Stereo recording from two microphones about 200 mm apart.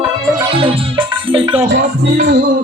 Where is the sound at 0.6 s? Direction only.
25° right (ahead or behind).